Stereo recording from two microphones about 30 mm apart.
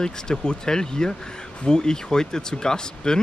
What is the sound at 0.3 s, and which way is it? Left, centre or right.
Speech, left.